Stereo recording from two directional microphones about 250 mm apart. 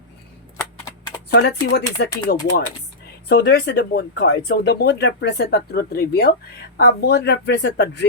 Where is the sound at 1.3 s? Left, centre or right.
Left.